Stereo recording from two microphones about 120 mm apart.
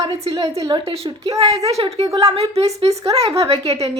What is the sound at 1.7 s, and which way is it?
A woman's voice, 60° right (ahead or behind).